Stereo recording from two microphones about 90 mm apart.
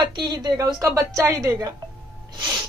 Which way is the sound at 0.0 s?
55° right (ahead or behind).